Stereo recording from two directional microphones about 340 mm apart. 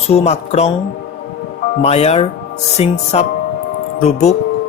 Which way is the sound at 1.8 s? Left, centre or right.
Centre.